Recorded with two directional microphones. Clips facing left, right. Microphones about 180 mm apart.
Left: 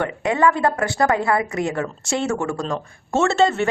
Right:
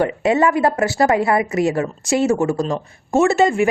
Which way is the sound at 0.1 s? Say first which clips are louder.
Right 3 dB; 20° right (ahead or behind).